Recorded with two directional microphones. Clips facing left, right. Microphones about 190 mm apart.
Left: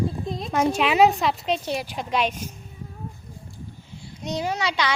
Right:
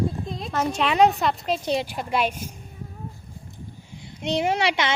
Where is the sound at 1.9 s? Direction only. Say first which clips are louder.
Even; 10° right (ahead or behind).